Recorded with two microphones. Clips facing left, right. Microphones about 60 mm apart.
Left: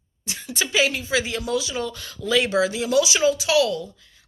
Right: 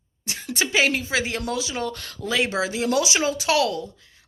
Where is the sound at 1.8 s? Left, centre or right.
Right.